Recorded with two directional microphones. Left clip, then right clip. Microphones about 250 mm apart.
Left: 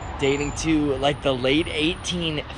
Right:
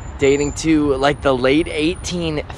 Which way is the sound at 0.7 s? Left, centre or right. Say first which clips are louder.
Right 6 dB; centre.